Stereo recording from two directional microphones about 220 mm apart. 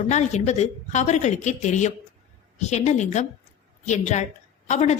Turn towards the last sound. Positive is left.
turn(degrees=30)  # may be behind; listen again after turning